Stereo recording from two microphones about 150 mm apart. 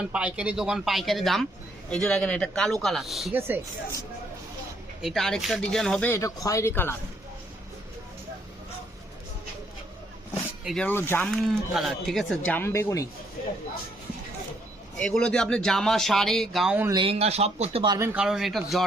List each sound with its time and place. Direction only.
0.0 s speech: 5° right (ahead or behind)
3.3 s speech: 15° right (ahead or behind)
5.0 s speech: centre (ahead or behind)
6.1 s speech: 20° left (ahead or behind)
10.6 s speech: centre (ahead or behind)
10.8 s speech: 15° left (ahead or behind)
11.3 s speech: centre (ahead or behind)
12.5 s speech: 15° left (ahead or behind)
14.9 s speech: 5° left (ahead or behind)
16.9 s speech: 35° right (ahead or behind)
17.8 s speech: 25° right (ahead or behind)
18.1 s speech: 5° right (ahead or behind)